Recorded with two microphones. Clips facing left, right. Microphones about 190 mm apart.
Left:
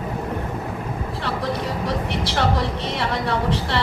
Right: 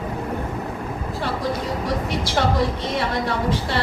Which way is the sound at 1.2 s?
65° left (ahead or behind).